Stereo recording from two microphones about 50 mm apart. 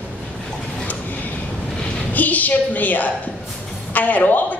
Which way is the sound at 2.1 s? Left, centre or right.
Left.